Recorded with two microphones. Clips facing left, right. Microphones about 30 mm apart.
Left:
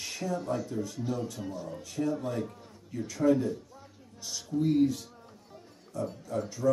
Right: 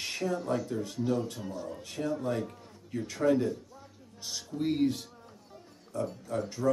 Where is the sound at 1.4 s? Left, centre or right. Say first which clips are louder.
Left 1 dB; centre.